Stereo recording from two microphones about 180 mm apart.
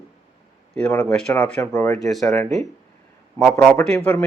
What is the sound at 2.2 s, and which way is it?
Speech, 15° left (ahead or behind).